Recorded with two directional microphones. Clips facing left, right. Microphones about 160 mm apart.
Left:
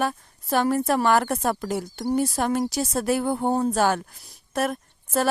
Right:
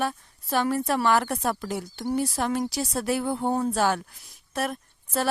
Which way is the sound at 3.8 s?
50° left (ahead or behind).